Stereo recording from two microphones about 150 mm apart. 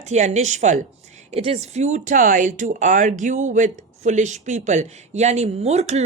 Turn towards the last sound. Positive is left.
turn(degrees=-45)  # may be behind; listen again after turning